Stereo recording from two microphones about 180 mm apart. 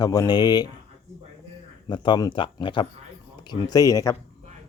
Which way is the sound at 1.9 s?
25° left (ahead or behind).